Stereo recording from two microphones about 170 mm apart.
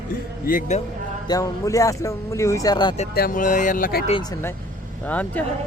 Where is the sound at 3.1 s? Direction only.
60° left (ahead or behind).